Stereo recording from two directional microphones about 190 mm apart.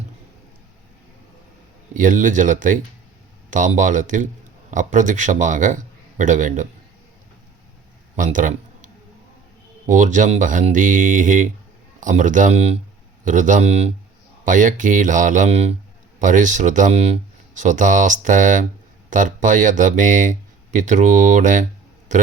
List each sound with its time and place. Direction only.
1.9 s speech: 45° right (ahead or behind)
8.1 s a sound: 45° right (ahead or behind)
9.9 s speech: 40° right (ahead or behind)